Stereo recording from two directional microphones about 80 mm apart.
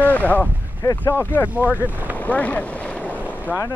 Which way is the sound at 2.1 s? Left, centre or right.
Centre.